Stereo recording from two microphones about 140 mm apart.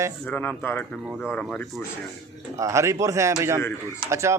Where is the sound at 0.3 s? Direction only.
10° left (ahead or behind).